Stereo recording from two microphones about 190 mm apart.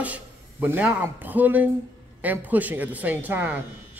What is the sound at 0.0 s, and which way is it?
Speech, 10° right (ahead or behind).